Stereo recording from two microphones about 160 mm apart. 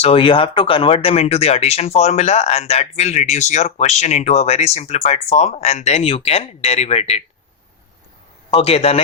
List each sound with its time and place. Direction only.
0.0 s speech: 35° left (ahead or behind)
8.4 s speech: 35° left (ahead or behind)